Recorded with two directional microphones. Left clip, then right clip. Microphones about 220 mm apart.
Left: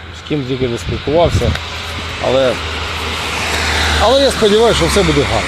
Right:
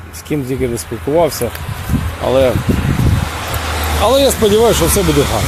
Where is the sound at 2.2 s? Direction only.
15° right (ahead or behind).